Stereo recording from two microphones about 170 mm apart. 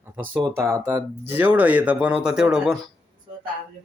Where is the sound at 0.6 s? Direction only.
15° right (ahead or behind).